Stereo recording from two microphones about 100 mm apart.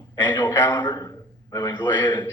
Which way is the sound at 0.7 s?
45° left (ahead or behind).